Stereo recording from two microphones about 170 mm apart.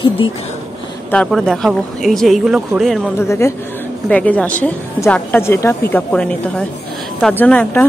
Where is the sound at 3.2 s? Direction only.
15° left (ahead or behind).